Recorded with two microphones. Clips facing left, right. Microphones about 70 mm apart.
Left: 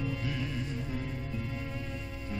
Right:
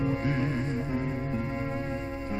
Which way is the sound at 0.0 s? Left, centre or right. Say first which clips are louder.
Right 7 dB; right.